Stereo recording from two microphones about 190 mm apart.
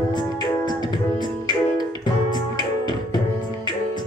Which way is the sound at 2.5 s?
25° left (ahead or behind).